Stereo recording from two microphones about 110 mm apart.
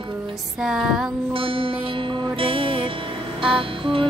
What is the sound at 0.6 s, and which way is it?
Music, 5° right (ahead or behind).